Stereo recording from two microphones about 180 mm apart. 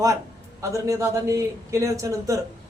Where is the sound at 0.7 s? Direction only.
15° right (ahead or behind).